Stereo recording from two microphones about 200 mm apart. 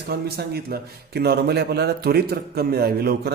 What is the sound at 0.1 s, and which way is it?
A man's voice, 55° right (ahead or behind).